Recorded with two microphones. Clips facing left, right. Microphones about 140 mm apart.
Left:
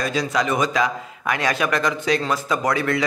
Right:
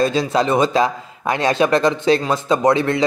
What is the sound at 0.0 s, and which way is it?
A man's voice, 30° right (ahead or behind).